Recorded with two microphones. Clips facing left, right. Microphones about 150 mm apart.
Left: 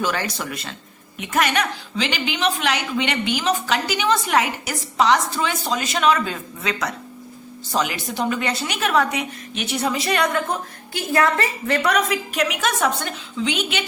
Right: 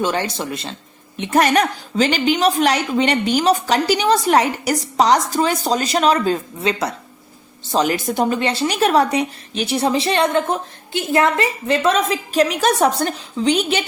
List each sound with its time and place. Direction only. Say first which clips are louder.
0.0 s a woman's voice: right 4 dB; 25° right (ahead or behind)
7.9 s a woman's voice: right 6 dB; 45° right (ahead or behind)
8.4 s a woman's voice: right 6 dB; 30° right (ahead or behind)